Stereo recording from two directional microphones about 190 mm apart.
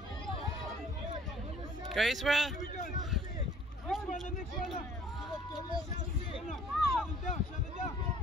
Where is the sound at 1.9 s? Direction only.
Centre (ahead or behind).